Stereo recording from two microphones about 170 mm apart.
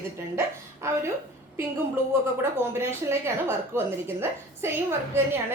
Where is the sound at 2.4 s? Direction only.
15° right (ahead or behind).